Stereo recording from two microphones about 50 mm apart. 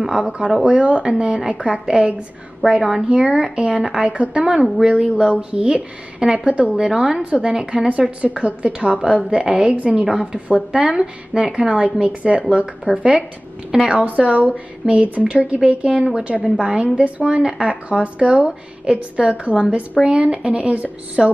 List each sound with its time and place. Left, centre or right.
0.0 s a woman's voice: centre
14.0 s a woman's voice: right